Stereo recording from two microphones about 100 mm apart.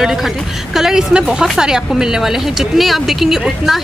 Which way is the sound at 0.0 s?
Centre (ahead or behind).